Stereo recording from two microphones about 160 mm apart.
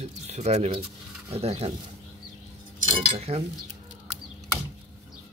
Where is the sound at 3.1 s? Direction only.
45° right (ahead or behind).